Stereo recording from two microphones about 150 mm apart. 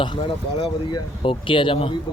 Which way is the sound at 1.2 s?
35° left (ahead or behind).